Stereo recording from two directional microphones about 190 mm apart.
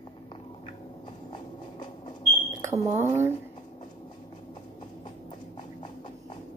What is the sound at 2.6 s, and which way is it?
Speech, 15° right (ahead or behind).